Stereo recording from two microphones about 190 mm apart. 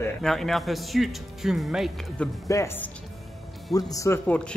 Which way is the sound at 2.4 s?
15° left (ahead or behind).